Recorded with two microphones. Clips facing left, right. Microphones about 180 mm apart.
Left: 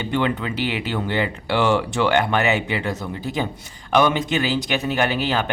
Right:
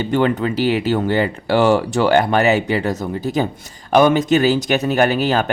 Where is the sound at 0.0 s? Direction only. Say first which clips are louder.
Right 5 dB; 40° right (ahead or behind).